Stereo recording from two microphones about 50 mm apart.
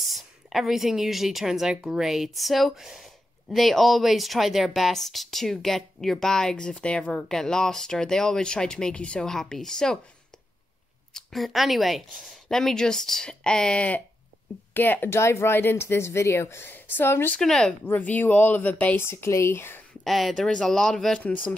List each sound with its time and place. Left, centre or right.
0.0 s a woman's voice: centre; by 7.3 s left
7.3 s a woman's voice: centre
9.3 s a woman's voice: centre
11.1 s a woman's voice: centre
14.7 s speech: left
15.0 s speech: left
16.6 s a woman's voice: left
17.4 s a woman's voice: centre
17.8 s speech: left
18.9 s a woman's voice: left
20.0 s speech: centre
20.3 s a woman's voice: centre